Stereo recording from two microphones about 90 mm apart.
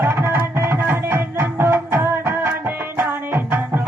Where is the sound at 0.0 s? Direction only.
25° right (ahead or behind).